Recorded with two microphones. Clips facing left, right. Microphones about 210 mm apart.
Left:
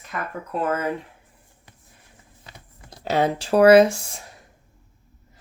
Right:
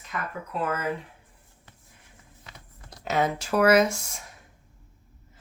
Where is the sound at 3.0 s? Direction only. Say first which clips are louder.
Left 4 dB; 30° left (ahead or behind).